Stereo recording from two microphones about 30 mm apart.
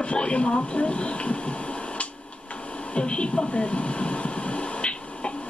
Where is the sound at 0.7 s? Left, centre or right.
Left.